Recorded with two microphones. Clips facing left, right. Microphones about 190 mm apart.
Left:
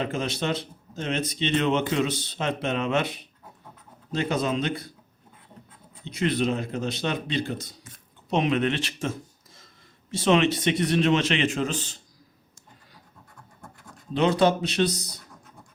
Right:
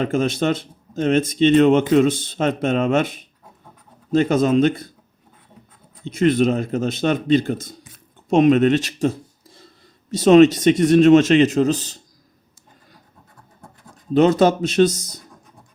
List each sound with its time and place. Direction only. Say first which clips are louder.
0.0 s speech: right 8 dB; 45° right (ahead or behind)
4.1 s speech: right 10 dB; 45° right (ahead or behind)
6.1 s a man's voice: right 8 dB; 50° right (ahead or behind)
14.1 s speech: right 6 dB; 45° right (ahead or behind)